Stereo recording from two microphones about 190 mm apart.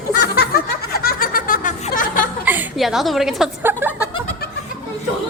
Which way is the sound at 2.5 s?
5° right (ahead or behind).